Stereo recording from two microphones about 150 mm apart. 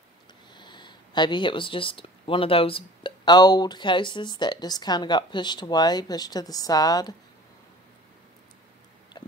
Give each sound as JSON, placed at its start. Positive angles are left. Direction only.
{"t": 0.6, "sound": "speech", "side_deg": 30}